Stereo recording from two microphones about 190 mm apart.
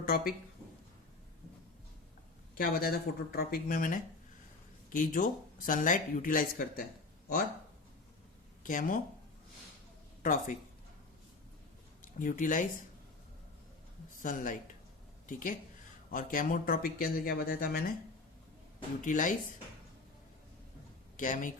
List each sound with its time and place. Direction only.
0.0 s speech: 50° left (ahead or behind)
2.6 s speech: 50° left (ahead or behind)
8.6 s speech: 45° left (ahead or behind)
10.2 s speech: 40° left (ahead or behind)
12.0 s speech: 45° left (ahead or behind)
14.2 s speech: 45° left (ahead or behind)
19.0 s speech: 45° left (ahead or behind)
21.2 s speech: 45° left (ahead or behind)